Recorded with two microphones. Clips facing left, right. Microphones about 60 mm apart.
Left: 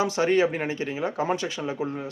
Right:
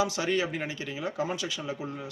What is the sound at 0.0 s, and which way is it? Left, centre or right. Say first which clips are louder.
Speech: left 6 dB; left.